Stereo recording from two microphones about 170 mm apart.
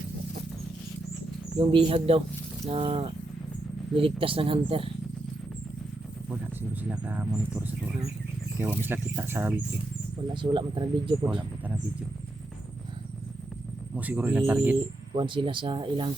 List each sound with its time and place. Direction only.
1.5 s speech: 30° right (ahead or behind)
6.3 s speech: 10° right (ahead or behind)
10.3 s speech: 30° right (ahead or behind)
13.9 s speech: 10° right (ahead or behind)
15.1 s speech: 30° right (ahead or behind)